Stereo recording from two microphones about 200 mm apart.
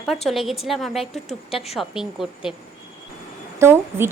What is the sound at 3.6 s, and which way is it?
Speech, 10° right (ahead or behind).